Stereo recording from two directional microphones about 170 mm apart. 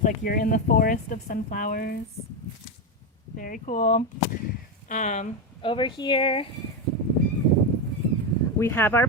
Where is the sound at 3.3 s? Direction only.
55° left (ahead or behind).